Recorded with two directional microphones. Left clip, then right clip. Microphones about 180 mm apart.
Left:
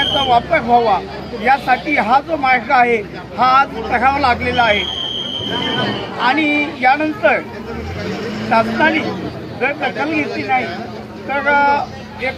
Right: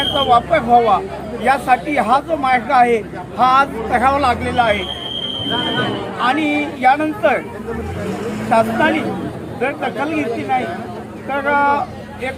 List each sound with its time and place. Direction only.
0.3 s speech: 20° right (ahead or behind)
6.1 s speech: 15° right (ahead or behind)
8.4 s speech: 15° right (ahead or behind)